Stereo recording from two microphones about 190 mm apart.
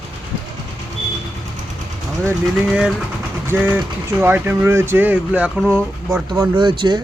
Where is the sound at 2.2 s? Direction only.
5° right (ahead or behind).